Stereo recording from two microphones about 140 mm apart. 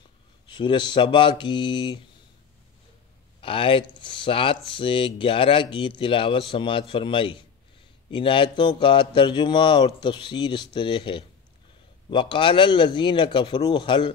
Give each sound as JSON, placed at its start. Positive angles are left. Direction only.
{"t": 0.5, "sound": "speech", "side_deg": 35}
{"t": 3.3, "sound": "a man's voice", "side_deg": 40}